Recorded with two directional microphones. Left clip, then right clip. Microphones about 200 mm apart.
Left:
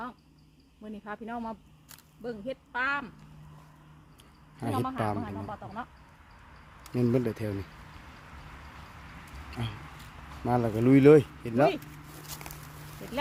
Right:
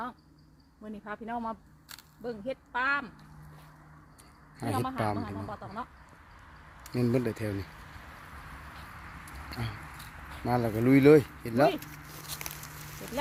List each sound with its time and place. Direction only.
0.9 s speech: centre (ahead or behind)
4.8 s speech: 30° right (ahead or behind)
6.9 s speech: 5° left (ahead or behind)
9.6 s speech: 15° left (ahead or behind)